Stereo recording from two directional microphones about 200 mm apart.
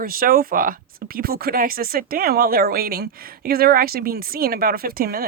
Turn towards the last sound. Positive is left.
turn(degrees=-50)  # may be behind; listen again after turning